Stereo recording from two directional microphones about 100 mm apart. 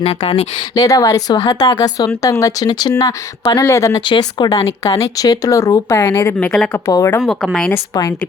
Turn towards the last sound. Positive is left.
turn(degrees=5)  # may be behind; listen again after turning